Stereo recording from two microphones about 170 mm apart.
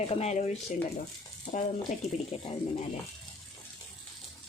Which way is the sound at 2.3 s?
40° left (ahead or behind).